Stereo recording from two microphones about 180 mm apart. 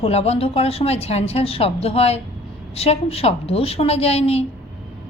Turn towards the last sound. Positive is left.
turn(degrees=35)  # may be behind; listen again after turning